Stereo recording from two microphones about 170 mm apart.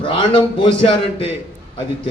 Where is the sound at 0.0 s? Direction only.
30° left (ahead or behind).